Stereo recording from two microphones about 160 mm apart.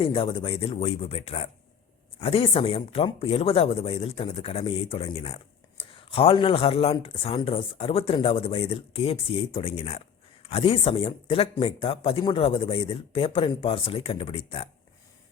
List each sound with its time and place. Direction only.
0.0 s speech: 35° left (ahead or behind)